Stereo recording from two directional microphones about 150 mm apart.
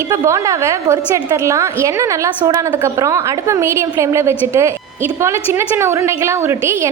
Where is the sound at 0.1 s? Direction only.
20° right (ahead or behind).